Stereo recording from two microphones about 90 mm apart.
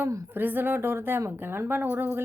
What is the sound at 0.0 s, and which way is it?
Speech, 35° right (ahead or behind).